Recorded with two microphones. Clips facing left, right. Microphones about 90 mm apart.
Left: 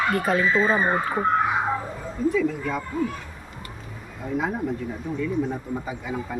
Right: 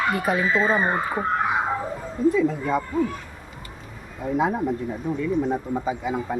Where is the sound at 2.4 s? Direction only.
25° right (ahead or behind).